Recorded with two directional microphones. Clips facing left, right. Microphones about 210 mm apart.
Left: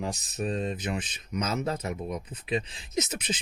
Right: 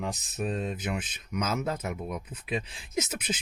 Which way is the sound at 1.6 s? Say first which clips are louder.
Left 1 dB; 35° left (ahead or behind).